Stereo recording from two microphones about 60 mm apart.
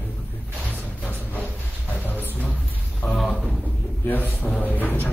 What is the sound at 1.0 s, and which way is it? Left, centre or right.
Music, left.